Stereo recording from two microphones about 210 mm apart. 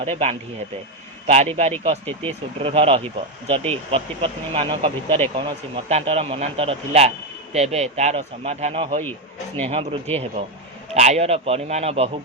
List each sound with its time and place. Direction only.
0.0 s speech: 30° right (ahead or behind)
1.5 s speech: 30° right (ahead or behind)